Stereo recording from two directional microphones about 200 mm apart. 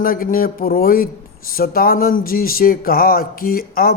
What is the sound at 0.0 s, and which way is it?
Speech, 45° left (ahead or behind).